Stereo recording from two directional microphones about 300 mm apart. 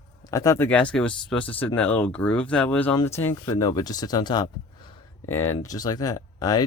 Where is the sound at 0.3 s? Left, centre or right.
Centre.